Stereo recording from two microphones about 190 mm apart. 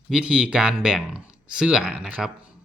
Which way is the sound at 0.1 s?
5° right (ahead or behind).